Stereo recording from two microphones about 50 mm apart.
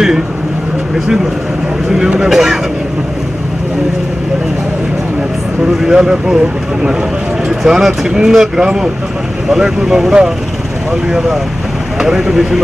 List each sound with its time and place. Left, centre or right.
0.9 s speech: centre
5.7 s speech: centre